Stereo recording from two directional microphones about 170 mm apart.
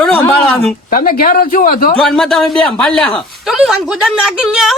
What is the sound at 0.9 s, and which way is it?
Speech, 55° left (ahead or behind).